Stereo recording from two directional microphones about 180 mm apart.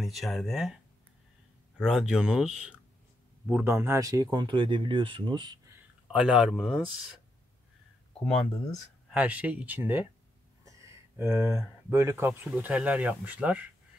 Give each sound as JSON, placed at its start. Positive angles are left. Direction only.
{"t": 0.0, "sound": "speech", "side_deg": 0}
{"t": 1.8, "sound": "speech", "side_deg": -5}
{"t": 6.1, "sound": "speech", "side_deg": -5}
{"t": 9.1, "sound": "speech", "side_deg": -10}
{"t": 10.6, "sound": "a sound", "side_deg": -15}
{"t": 12.4, "sound": "speech", "side_deg": -5}